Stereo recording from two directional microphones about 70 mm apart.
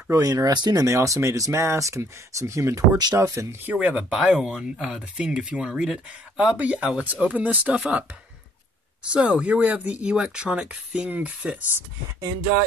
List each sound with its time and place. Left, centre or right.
0.1 s speech: right
0.8 s speech: right
3.6 s speech: right
4.1 s speech: centre
9.1 s speech: centre